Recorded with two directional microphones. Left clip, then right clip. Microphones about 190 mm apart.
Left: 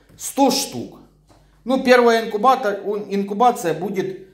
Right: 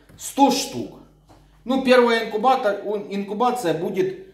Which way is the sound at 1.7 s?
50° left (ahead or behind).